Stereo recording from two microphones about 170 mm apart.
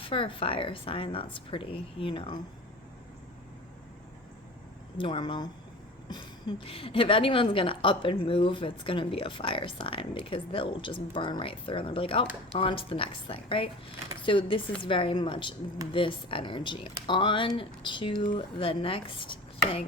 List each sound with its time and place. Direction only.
0.0 s a woman's voice: 30° left (ahead or behind)
4.9 s speech: 30° left (ahead or behind)
6.7 s a woman's voice: 30° left (ahead or behind)